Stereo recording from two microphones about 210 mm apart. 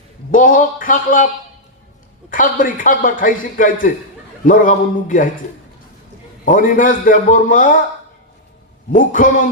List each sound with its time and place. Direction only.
0.3 s a man's voice: 40° left (ahead or behind)
2.3 s a man's voice: 40° left (ahead or behind)
6.4 s a man's voice: 40° left (ahead or behind)
8.9 s a man's voice: 40° left (ahead or behind)